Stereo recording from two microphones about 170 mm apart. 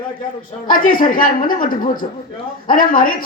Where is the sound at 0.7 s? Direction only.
55° left (ahead or behind).